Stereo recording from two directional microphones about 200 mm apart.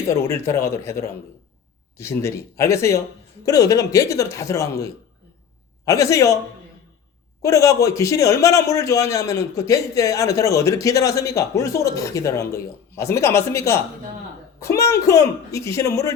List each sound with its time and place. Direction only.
0.1 s a man's voice: 15° left (ahead or behind)
7.4 s a man's voice: 15° left (ahead or behind)